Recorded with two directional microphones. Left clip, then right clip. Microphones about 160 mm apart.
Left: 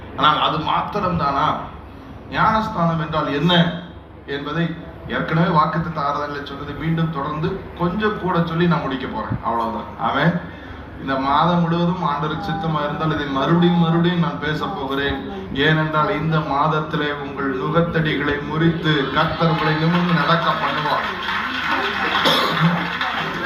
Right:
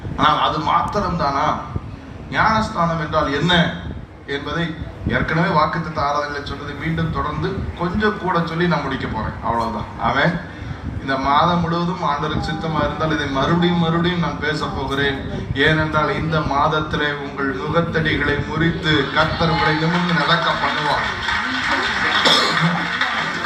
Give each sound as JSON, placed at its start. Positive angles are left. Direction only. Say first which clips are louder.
{"t": 0.2, "sound": "a man's voice", "louder": "even", "side_deg": 25}
{"t": 7.8, "sound": "a man's voice", "louder": "right 1 dB", "side_deg": 30}
{"t": 11.0, "sound": "a man's voice", "louder": "right 1 dB", "side_deg": 30}